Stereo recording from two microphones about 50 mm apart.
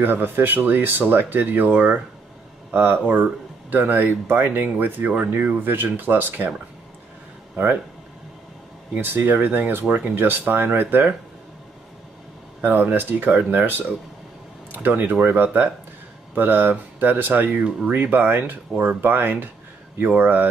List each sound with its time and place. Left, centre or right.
0.0 s speech: right
9.0 s speech: right
12.6 s speech: right